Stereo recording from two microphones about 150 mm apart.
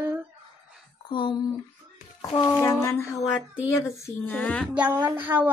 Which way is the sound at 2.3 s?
20° left (ahead or behind).